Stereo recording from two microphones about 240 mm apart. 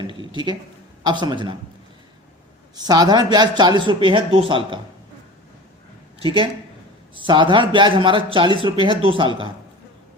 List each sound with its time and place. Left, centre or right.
0.0 s a sound: centre
1.0 s speech: centre
2.7 s speech: centre
6.2 s speech: right